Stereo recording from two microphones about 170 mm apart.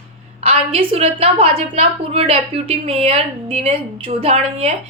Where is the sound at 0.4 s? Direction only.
35° right (ahead or behind).